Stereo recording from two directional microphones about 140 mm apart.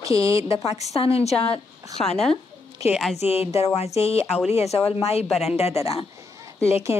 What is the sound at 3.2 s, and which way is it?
Speech, 50° left (ahead or behind).